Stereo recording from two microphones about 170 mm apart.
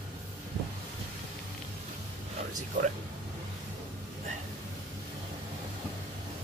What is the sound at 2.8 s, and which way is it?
Speech, 50° right (ahead or behind).